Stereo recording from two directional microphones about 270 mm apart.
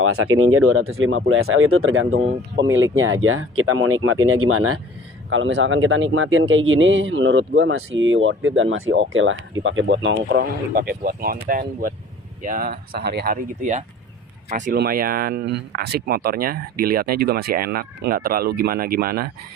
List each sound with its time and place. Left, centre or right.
0.0 s speech: right